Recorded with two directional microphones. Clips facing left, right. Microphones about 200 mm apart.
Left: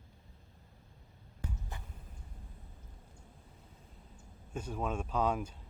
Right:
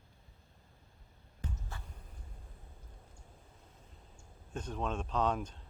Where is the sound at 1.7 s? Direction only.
20° left (ahead or behind).